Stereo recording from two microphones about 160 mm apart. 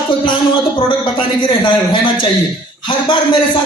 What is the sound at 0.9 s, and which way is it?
A man's voice, 30° left (ahead or behind).